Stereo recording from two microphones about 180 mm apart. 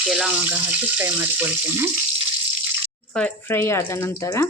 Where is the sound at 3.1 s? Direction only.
5° left (ahead or behind).